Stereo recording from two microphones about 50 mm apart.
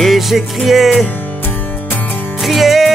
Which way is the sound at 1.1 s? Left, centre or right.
Left.